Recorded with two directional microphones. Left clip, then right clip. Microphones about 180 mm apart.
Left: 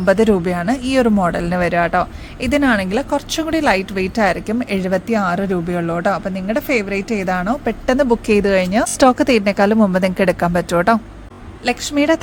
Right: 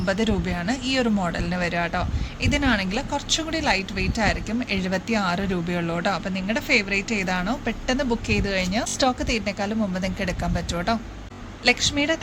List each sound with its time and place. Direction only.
0.0 s speech: 60° left (ahead or behind)
11.6 s a woman's voice: 45° left (ahead or behind)